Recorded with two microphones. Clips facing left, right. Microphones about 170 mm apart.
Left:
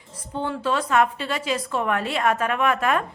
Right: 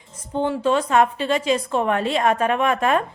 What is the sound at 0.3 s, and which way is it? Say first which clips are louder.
A woman's voice: right 5 dB; 20° right (ahead or behind).